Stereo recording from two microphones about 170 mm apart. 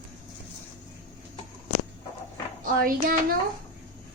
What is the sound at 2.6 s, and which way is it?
Speech, 55° right (ahead or behind).